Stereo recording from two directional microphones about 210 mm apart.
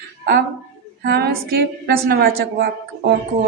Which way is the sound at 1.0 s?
50° right (ahead or behind).